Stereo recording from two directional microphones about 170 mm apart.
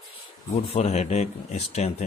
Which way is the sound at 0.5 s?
40° left (ahead or behind).